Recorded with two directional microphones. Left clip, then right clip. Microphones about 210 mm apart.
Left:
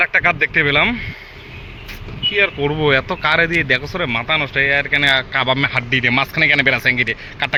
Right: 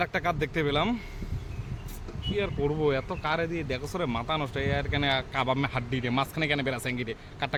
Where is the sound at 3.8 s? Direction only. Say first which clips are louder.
Left 11 dB; 20° right (ahead or behind).